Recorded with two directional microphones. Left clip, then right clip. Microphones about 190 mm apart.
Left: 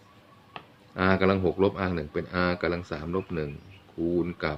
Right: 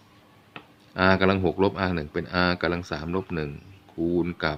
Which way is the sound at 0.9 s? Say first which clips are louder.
Right 3 dB; 20° right (ahead or behind).